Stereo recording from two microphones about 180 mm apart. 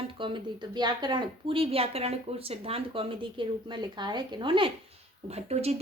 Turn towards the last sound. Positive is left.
turn(degrees=-35)  # may be behind; listen again after turning